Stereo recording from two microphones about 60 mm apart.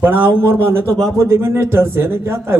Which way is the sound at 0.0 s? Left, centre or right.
Right.